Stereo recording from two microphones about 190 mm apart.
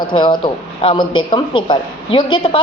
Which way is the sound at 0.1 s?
25° left (ahead or behind).